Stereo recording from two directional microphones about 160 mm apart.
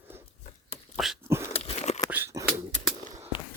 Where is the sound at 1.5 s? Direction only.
40° left (ahead or behind).